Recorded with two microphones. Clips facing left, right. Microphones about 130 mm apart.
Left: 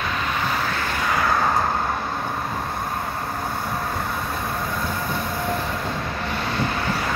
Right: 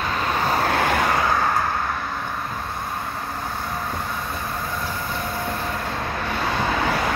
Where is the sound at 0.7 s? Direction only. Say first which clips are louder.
Right 6 dB; 70° right (ahead or behind).